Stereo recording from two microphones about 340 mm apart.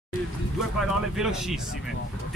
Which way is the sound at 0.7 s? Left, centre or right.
Centre.